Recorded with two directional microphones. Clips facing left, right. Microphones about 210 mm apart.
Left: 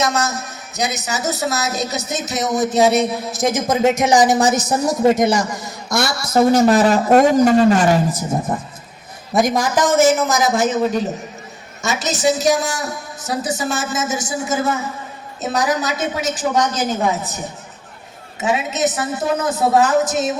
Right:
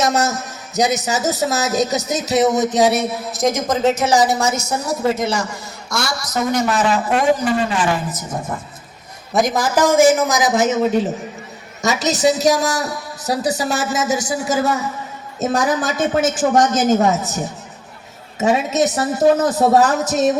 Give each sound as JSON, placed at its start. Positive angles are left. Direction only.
{"t": 0.0, "sound": "speech", "side_deg": -45}
{"t": 3.3, "sound": "a woman's voice", "side_deg": 5}
{"t": 9.3, "sound": "a man's voice", "side_deg": 0}
{"t": 11.8, "sound": "a man's voice", "side_deg": -35}
{"t": 15.4, "sound": "speech", "side_deg": -50}
{"t": 18.3, "sound": "a man's voice", "side_deg": -40}